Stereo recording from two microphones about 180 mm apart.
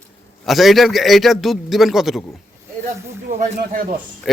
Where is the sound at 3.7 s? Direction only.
50° right (ahead or behind).